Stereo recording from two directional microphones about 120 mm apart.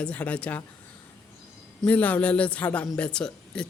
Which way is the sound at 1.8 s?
10° left (ahead or behind).